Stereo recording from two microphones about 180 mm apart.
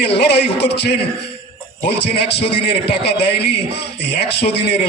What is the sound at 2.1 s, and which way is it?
A man's voice, 65° left (ahead or behind).